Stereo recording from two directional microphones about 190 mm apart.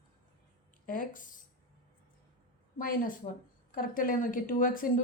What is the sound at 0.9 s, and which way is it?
Speech, 45° left (ahead or behind).